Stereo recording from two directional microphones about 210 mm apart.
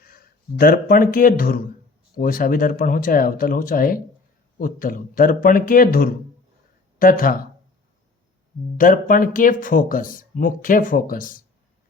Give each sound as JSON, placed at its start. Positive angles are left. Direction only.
{"t": 0.0, "sound": "speech", "side_deg": 45}
{"t": 8.8, "sound": "speech", "side_deg": 40}